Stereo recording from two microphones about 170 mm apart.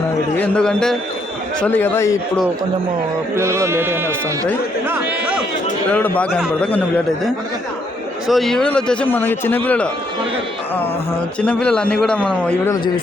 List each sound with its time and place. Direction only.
0.3 s a man's voice: 5° left (ahead or behind)
3.3 s speech: 15° right (ahead or behind)
5.9 s a man's voice: 10° left (ahead or behind)
8.3 s a man's voice: centre (ahead or behind)
11.3 s a man's voice: 5° left (ahead or behind)